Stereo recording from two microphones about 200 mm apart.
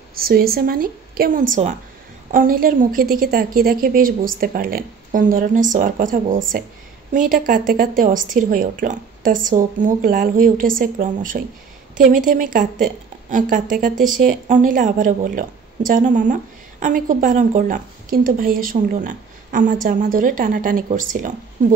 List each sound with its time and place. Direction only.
0.1 s a woman's voice: 50° right (ahead or behind)